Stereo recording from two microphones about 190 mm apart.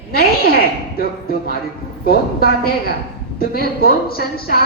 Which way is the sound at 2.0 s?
50° left (ahead or behind).